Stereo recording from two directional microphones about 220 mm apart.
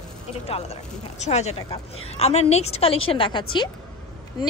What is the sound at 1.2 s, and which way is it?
A woman's voice, 30° left (ahead or behind).